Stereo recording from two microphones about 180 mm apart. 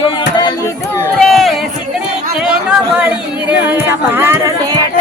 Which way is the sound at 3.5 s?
10° right (ahead or behind).